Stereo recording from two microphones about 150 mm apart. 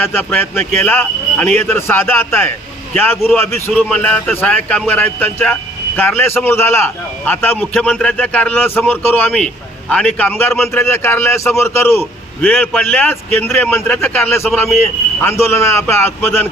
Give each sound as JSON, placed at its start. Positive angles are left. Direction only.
{"t": 0.0, "sound": "a man's voice", "side_deg": 10}
{"t": 3.8, "sound": "a man's voice", "side_deg": 5}